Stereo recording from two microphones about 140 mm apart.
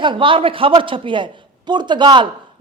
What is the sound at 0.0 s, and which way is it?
Speech, 35° right (ahead or behind).